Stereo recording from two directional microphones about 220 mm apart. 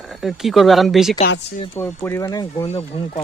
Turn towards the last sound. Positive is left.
turn(degrees=25)  # may be behind; listen again after turning